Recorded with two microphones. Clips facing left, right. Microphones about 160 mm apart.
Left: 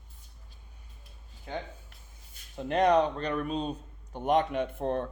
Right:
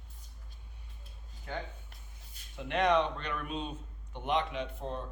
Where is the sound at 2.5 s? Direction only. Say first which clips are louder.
Left 4 dB; 40° left (ahead or behind); by 5.1 s 60° left (ahead or behind).